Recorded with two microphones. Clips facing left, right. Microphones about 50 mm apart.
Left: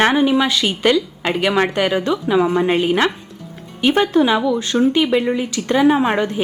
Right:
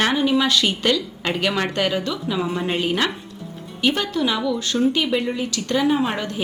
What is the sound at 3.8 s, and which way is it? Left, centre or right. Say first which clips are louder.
A woman's voice: left 6 dB; left.